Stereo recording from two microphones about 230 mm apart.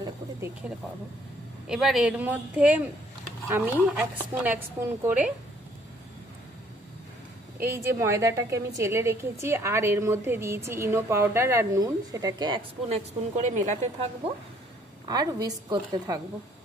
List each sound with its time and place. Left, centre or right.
0.0 s a woman's voice: centre
7.5 s a woman's voice: centre; by 13.7 s right
15.0 s a woman's voice: centre